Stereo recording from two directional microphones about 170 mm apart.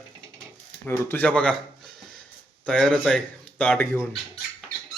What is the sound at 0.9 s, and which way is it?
A man's voice, 10° left (ahead or behind).